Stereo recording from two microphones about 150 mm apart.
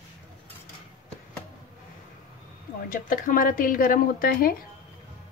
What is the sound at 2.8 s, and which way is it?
Speech, 65° left (ahead or behind).